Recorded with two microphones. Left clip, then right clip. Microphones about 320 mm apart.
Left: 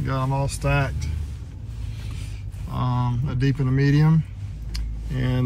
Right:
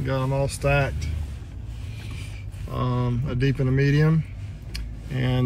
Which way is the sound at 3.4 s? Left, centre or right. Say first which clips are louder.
Right 1 dB; centre.